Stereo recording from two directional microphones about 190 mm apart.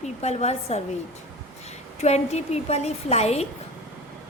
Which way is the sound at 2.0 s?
35° left (ahead or behind).